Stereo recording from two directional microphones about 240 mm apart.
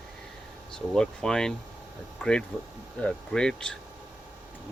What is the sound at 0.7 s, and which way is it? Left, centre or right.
Speech, centre.